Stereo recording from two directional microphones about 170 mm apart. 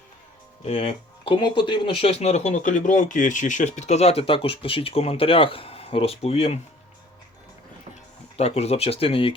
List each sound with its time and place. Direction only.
0.6 s speech: 35° left (ahead or behind)
8.4 s speech: 35° left (ahead or behind)